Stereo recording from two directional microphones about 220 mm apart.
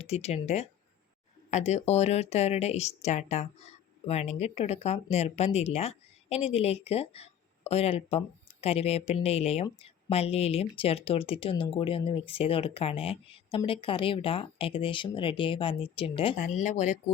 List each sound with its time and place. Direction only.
0.0 s speech: 30° left (ahead or behind)